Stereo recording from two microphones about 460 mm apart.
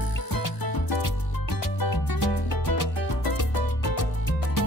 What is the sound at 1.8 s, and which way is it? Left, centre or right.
Music, left.